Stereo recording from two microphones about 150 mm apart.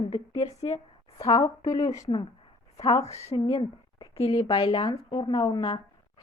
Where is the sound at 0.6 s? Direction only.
40° left (ahead or behind).